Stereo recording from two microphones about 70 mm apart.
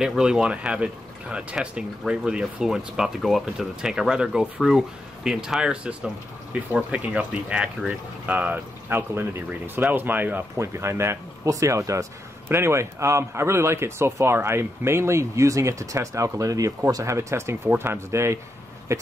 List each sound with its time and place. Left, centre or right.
0.0 s speech: centre; by 10.4 s right
10.6 s speech: right
12.4 s speech: right